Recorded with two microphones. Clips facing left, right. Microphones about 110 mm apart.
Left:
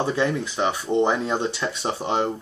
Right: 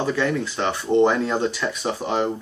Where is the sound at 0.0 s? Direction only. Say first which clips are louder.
Right 1 dB; 20° left (ahead or behind).